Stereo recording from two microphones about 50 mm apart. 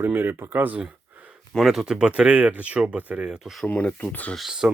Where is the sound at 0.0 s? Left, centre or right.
Right.